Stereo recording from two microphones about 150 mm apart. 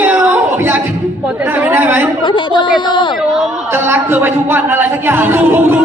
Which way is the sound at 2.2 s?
30° left (ahead or behind).